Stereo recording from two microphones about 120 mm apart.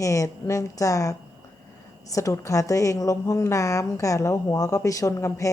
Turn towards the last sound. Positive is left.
turn(degrees=25)  # may be behind; listen again after turning